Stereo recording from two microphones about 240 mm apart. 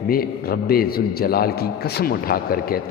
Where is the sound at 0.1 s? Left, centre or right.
Left.